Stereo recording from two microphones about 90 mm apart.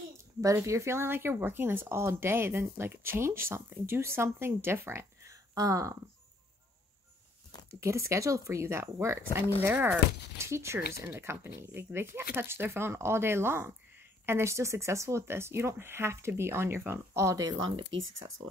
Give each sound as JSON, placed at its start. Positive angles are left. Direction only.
{"t": 0.4, "sound": "speech", "side_deg": -35}
{"t": 7.8, "sound": "speech", "side_deg": -35}
{"t": 17.6, "sound": "speech", "side_deg": -65}